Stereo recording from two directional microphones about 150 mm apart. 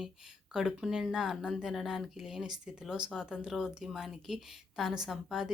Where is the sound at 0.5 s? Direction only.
5° right (ahead or behind).